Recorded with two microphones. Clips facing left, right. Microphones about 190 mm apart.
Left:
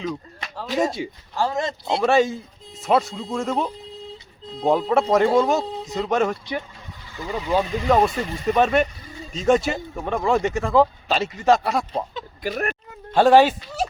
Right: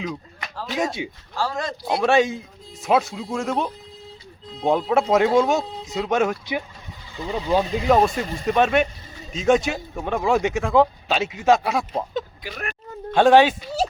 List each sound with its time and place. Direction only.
0.8 s speech: centre (ahead or behind)
1.4 s speech: 20° left (ahead or behind)
2.0 s speech: centre (ahead or behind)
7.2 s speech: 20° right (ahead or behind)
7.9 s speech: centre (ahead or behind)
12.4 s speech: 45° left (ahead or behind)
13.1 s speech: 5° left (ahead or behind)